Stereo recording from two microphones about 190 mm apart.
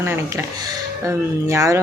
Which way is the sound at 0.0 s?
15° right (ahead or behind).